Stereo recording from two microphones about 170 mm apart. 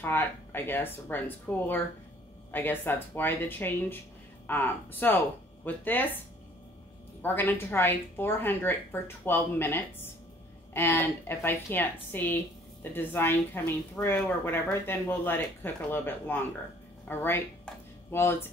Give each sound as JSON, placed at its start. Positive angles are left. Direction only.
{"t": 0.0, "sound": "a woman's voice", "side_deg": 10}